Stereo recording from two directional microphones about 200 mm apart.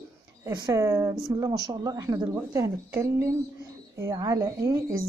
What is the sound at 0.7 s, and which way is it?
Speech, 15° right (ahead or behind).